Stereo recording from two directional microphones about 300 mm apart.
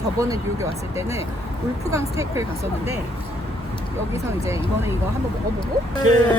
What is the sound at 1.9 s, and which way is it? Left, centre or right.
Speech, centre.